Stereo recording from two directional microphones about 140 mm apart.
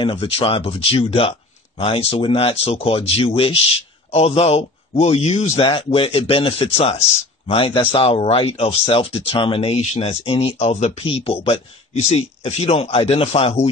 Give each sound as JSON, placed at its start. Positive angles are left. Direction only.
{"t": 0.0, "sound": "speech", "side_deg": 40}